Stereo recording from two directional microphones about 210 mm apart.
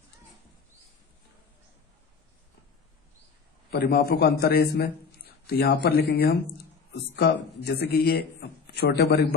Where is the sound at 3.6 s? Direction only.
45° left (ahead or behind).